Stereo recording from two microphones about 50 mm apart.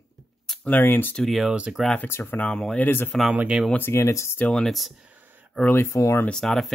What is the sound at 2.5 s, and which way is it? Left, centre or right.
Speech, centre.